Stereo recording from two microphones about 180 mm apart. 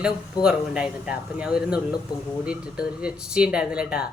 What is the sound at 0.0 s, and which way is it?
Speech, 5° right (ahead or behind).